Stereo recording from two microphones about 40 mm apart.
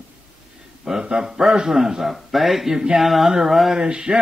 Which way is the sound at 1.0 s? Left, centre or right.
Right.